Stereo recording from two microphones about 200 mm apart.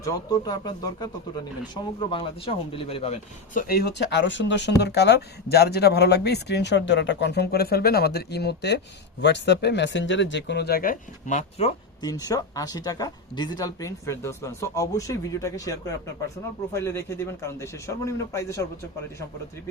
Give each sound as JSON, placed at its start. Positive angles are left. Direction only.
{"t": 0.0, "sound": "a man's voice", "side_deg": 20}
{"t": 12.0, "sound": "speech", "side_deg": 20}
{"t": 16.7, "sound": "speech", "side_deg": 10}